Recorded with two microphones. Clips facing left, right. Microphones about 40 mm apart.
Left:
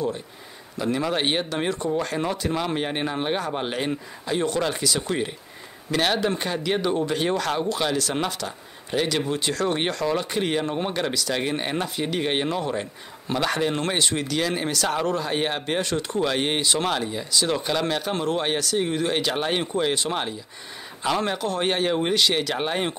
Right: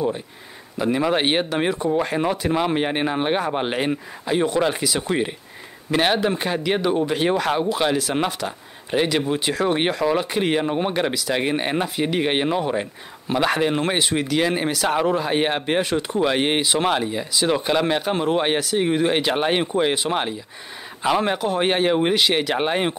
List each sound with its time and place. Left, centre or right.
0.7 s speech: centre